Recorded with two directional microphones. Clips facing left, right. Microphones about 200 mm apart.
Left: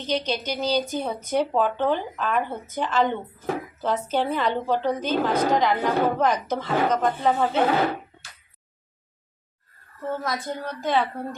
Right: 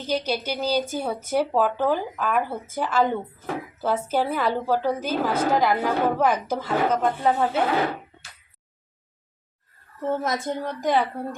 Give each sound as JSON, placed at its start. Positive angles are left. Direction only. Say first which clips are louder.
{"t": 0.0, "sound": "a woman's voice", "louder": "right 1 dB", "side_deg": -10}
{"t": 10.0, "sound": "a woman's voice", "louder": "right 3 dB", "side_deg": -25}